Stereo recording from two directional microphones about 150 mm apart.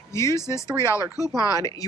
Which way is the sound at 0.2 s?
20° left (ahead or behind).